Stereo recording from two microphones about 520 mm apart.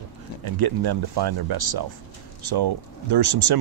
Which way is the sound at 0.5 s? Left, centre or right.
Right.